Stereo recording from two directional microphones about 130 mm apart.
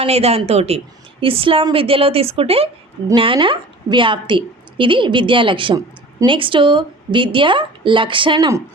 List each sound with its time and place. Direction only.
0.0 s a woman's voice: 50° right (ahead or behind)